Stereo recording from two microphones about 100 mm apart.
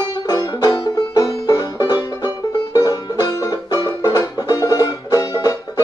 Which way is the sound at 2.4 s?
35° left (ahead or behind).